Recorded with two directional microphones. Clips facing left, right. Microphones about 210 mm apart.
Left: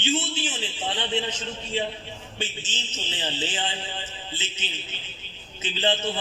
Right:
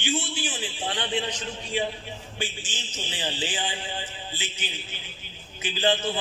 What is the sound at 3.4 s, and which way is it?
Speech, 15° right (ahead or behind).